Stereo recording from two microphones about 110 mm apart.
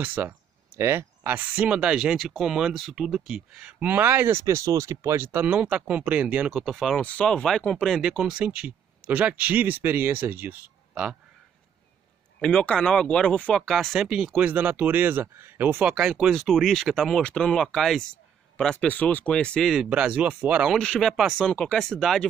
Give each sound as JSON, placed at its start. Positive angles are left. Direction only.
{"t": 0.0, "sound": "speech", "side_deg": -15}
{"t": 6.5, "sound": "speech", "side_deg": 0}
{"t": 12.4, "sound": "speech", "side_deg": 10}
{"t": 14.3, "sound": "speech", "side_deg": -15}
{"t": 15.9, "sound": "speech", "side_deg": -5}
{"t": 19.9, "sound": "speech", "side_deg": -10}
{"t": 20.7, "sound": "speech", "side_deg": 5}